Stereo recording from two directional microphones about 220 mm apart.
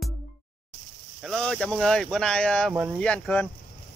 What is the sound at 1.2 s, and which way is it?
Speech, 5° left (ahead or behind).